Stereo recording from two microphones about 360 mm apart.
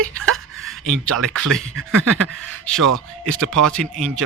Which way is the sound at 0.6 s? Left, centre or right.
Centre.